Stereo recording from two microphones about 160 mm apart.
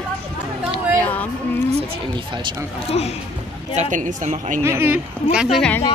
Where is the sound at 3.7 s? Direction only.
50° right (ahead or behind).